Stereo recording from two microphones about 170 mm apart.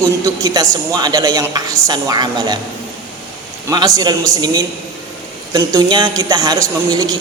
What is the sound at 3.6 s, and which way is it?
A man's voice, 20° right (ahead or behind).